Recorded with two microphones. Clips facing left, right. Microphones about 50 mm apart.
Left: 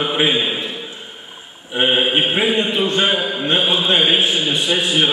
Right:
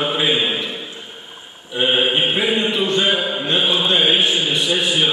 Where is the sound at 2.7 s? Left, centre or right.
Left.